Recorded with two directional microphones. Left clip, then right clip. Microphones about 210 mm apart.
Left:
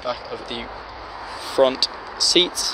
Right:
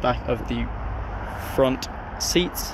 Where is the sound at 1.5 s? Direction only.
5° left (ahead or behind).